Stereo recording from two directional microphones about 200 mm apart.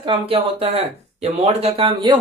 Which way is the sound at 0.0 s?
25° right (ahead or behind).